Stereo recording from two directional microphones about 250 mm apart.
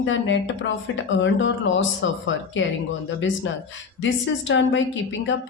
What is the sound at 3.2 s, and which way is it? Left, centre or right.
A woman's voice, left.